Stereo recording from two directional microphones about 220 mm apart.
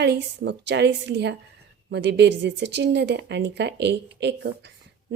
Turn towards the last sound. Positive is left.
turn(degrees=-50)  # may be behind; listen again after turning